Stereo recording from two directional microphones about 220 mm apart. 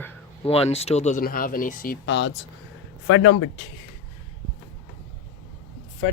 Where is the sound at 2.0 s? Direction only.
55° left (ahead or behind).